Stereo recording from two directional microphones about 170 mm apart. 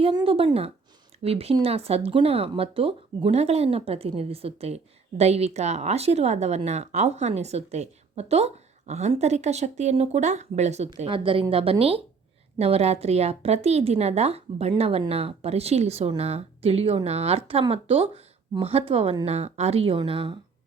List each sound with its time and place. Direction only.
0.0 s speech: 30° right (ahead or behind)